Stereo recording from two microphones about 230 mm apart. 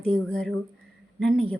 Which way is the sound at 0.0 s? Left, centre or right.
Centre.